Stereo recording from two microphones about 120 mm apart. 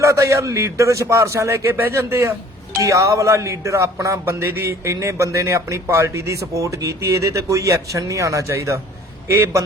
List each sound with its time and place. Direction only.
0.0 s speech: 25° right (ahead or behind)